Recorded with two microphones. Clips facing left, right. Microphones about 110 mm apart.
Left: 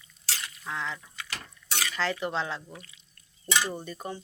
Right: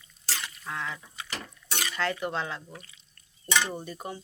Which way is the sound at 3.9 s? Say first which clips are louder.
Left 1 dB; 10° right (ahead or behind).